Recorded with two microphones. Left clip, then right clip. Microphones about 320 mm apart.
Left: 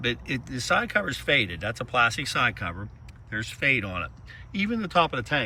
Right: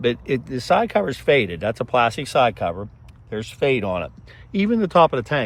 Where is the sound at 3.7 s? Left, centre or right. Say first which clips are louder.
Right 6 dB; centre.